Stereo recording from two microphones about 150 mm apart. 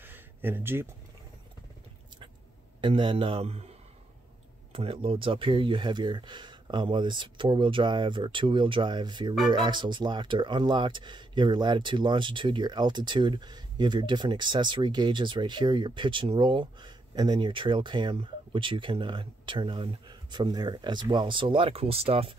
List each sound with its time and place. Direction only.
0.0 s a sound: 15° right (ahead or behind)
2.8 s speech: 35° right (ahead or behind)
4.7 s speech: 35° right (ahead or behind)